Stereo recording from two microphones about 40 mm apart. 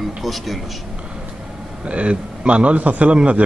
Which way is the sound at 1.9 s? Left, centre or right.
Right.